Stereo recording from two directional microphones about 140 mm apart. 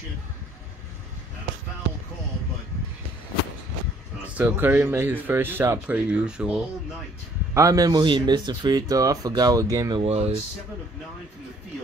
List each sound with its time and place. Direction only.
4.4 s speech: 10° right (ahead or behind)
7.5 s speech: 25° right (ahead or behind)
9.9 s speech: 50° right (ahead or behind)